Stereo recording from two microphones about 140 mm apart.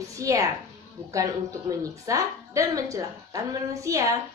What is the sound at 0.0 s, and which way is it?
A woman's voice, 25° right (ahead or behind).